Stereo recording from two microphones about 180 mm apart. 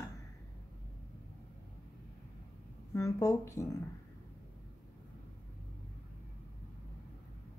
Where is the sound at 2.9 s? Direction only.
15° left (ahead or behind).